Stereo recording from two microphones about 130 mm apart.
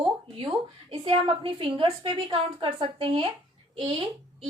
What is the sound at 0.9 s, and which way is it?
A woman's voice, 40° right (ahead or behind).